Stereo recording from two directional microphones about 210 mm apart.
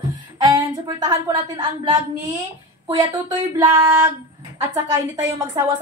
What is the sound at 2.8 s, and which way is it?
Speech, 20° right (ahead or behind).